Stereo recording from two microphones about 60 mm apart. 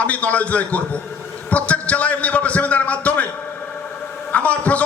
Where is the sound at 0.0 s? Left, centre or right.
Left.